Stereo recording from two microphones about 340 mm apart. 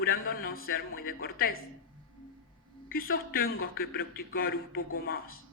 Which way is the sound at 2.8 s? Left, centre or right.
Left.